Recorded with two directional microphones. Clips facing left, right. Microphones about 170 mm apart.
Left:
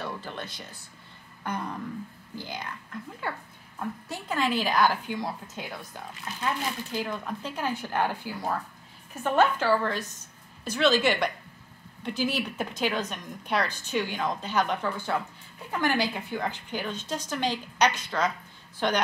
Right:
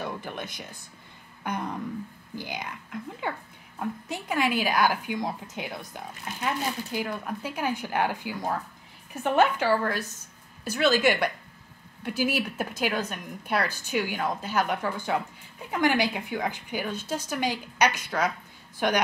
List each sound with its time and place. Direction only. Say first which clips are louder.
0.0 s speech: right 2 dB; 15° right (ahead or behind)